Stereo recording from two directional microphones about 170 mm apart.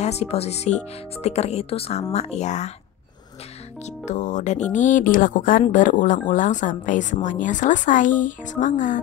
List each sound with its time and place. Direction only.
0.0 s speech: 40° left (ahead or behind)
3.8 s speech: 45° left (ahead or behind)